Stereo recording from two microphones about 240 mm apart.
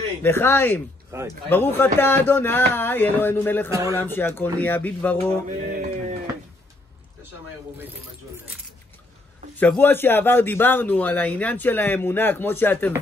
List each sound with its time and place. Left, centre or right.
0.2 s a man's voice: centre
5.7 s a sound: right
9.6 s a man's voice: centre